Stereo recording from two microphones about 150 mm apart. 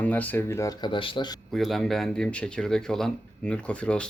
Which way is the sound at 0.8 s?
35° left (ahead or behind).